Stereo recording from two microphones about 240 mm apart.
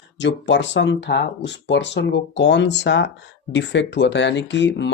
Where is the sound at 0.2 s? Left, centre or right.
Left.